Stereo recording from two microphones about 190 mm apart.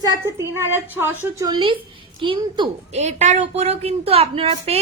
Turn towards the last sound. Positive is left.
turn(degrees=-30)  # may be behind; listen again after turning